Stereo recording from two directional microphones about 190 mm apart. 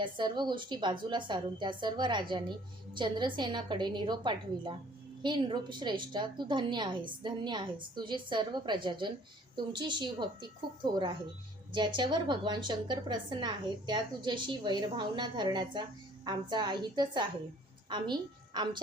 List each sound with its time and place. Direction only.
0.0 s a woman's voice: 25° right (ahead or behind)